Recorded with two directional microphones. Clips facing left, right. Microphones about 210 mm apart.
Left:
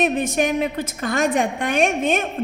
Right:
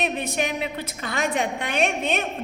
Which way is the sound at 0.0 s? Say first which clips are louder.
Left 6 dB; 50° left (ahead or behind).